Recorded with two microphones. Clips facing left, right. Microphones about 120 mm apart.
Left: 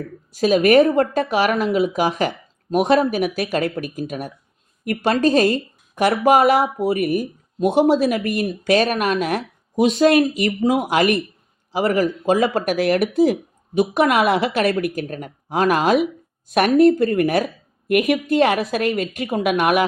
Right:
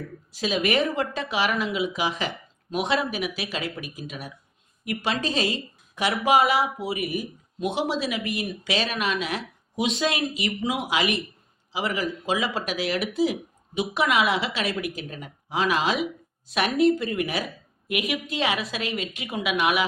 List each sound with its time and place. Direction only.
0.3 s a woman's voice: 50° left (ahead or behind)